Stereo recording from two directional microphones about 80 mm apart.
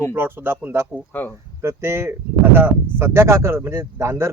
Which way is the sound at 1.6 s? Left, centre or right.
Right.